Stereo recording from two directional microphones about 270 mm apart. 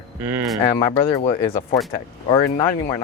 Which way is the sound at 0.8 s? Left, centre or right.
Centre.